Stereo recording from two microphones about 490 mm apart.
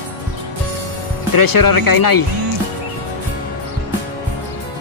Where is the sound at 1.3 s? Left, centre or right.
Left.